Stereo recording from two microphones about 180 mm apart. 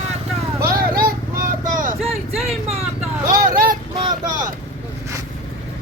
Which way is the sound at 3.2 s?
50° right (ahead or behind).